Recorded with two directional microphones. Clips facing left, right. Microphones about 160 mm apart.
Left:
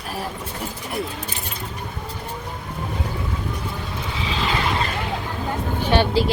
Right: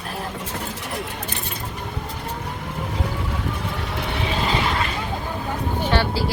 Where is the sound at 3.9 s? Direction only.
70° right (ahead or behind).